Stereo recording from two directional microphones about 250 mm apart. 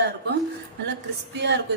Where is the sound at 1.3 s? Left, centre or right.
Right.